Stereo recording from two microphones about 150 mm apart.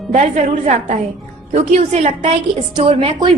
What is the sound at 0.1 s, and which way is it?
A woman's voice, 55° right (ahead or behind).